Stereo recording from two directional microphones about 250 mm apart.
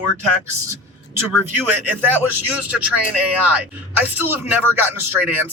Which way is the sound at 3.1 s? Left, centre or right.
Centre.